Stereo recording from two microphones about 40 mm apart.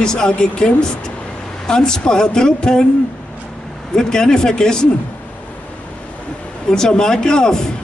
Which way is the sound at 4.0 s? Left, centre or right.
Centre.